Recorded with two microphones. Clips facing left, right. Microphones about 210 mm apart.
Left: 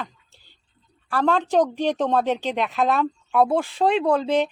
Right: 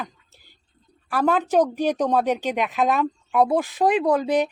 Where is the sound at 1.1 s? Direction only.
10° right (ahead or behind).